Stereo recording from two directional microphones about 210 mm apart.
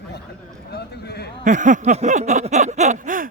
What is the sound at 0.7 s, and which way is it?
Speech, 50° left (ahead or behind).